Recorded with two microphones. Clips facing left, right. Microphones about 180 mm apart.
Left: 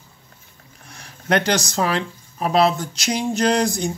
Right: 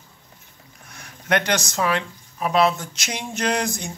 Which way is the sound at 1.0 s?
35° left (ahead or behind).